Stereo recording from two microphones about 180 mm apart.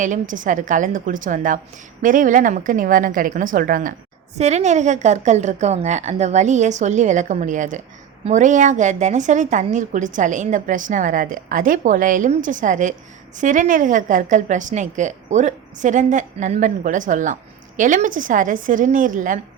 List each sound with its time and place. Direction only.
0.0 s a woman's voice: 45° right (ahead or behind)